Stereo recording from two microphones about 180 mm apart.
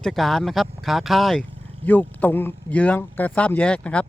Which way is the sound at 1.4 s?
30° right (ahead or behind).